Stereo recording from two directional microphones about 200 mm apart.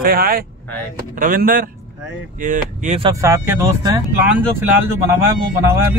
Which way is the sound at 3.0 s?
15° right (ahead or behind).